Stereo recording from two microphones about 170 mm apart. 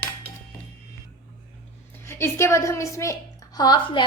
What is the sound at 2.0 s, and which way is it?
A woman's voice, 15° left (ahead or behind).